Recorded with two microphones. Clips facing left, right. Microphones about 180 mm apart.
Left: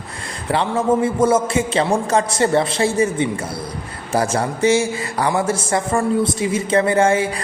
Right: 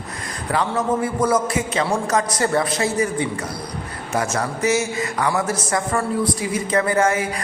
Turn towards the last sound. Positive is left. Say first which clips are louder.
# left 3 dB
turn(degrees=30)  # may be behind; listen again after turning